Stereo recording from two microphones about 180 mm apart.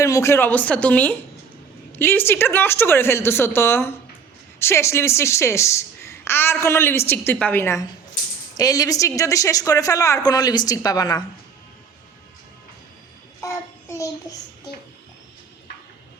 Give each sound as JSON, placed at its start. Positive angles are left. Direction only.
{"t": 0.0, "sound": "a woman's voice", "side_deg": 15}
{"t": 13.4, "sound": "child singing", "side_deg": 15}